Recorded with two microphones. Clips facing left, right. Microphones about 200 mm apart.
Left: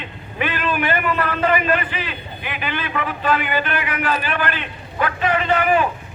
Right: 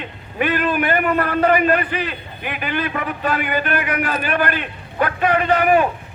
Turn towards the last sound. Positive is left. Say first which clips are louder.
# right 2 dB
turn(degrees=-45)  # may be behind; listen again after turning